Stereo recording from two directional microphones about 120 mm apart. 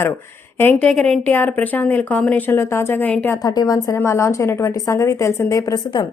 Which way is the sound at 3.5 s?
30° left (ahead or behind).